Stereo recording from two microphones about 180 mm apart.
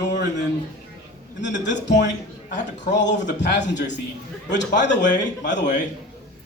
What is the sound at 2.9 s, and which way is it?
A man's voice, 80° left.